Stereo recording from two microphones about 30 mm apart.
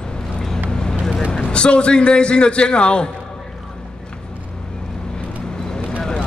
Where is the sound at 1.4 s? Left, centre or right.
Left.